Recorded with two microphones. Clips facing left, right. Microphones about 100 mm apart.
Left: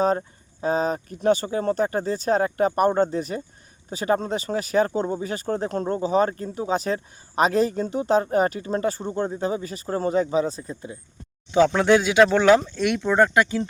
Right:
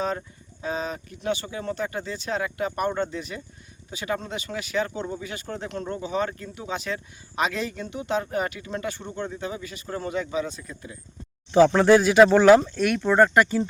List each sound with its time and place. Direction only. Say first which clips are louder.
0.0 s speech: left 7 dB; 40° left (ahead or behind)
11.5 s speech: right 1 dB; 5° right (ahead or behind)